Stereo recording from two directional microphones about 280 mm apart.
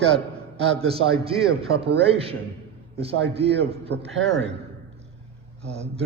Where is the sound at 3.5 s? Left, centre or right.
Right.